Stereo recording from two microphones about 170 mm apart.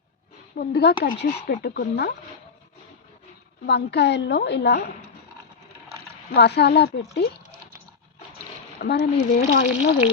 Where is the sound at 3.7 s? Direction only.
85° left.